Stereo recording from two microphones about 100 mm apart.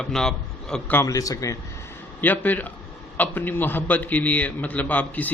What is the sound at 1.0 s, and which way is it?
Speech, 35° left (ahead or behind).